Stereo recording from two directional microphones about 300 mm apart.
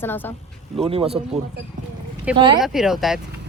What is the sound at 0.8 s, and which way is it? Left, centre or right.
Speech, centre.